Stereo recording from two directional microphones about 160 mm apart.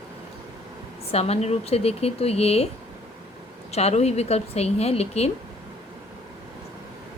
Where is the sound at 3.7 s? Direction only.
40° left (ahead or behind).